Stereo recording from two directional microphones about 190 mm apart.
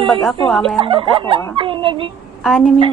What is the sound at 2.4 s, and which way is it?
Speech, centre (ahead or behind).